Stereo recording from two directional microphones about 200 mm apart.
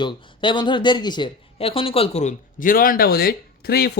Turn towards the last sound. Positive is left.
turn(degrees=50)  # may be behind; listen again after turning